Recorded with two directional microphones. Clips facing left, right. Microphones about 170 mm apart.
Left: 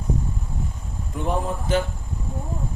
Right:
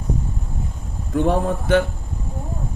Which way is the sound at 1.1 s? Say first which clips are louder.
Right 7 dB; 70° right (ahead or behind).